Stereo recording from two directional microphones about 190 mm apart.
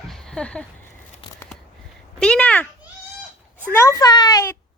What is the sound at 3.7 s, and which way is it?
Speech, 15° left (ahead or behind).